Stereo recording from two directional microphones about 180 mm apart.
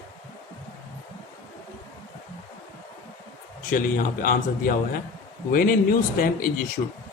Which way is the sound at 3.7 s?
50° left (ahead or behind).